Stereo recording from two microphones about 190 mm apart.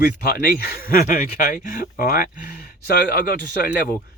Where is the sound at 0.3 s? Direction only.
50° left (ahead or behind).